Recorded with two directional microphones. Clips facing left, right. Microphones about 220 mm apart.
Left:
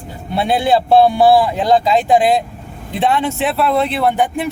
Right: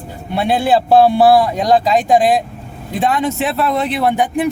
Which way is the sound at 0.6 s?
Centre (ahead or behind).